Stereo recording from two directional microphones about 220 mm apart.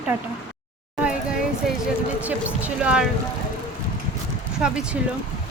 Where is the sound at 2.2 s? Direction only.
5° right (ahead or behind).